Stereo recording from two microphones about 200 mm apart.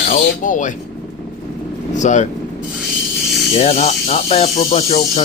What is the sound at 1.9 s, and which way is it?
Speech, 35° left (ahead or behind).